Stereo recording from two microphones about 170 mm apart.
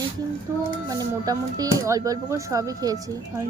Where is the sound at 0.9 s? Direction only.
20° right (ahead or behind).